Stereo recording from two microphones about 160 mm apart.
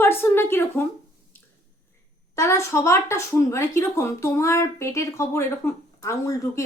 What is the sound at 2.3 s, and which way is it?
A woman's voice, 20° left (ahead or behind).